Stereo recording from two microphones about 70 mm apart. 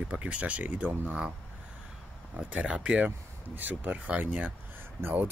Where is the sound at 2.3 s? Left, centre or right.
Centre.